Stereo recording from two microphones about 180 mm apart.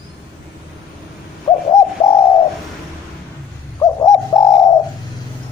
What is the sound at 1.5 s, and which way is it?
Bird, 30° left (ahead or behind).